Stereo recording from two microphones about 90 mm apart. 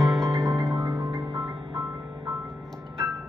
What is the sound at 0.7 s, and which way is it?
Music, 45° right (ahead or behind).